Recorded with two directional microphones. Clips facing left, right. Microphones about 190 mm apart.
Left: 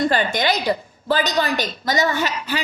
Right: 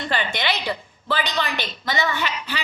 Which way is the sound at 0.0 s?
45° left (ahead or behind).